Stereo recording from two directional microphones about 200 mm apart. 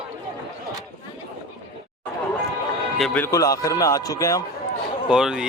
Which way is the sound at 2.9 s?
5° left (ahead or behind).